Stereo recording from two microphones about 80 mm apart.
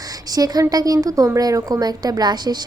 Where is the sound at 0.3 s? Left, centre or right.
Right.